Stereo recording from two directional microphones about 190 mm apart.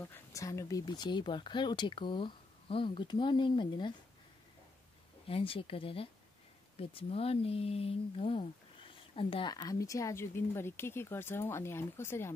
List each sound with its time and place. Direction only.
0.0 s speech: 15° left (ahead or behind)
5.3 s speech: 30° left (ahead or behind); by 12.3 s 15° left (ahead or behind)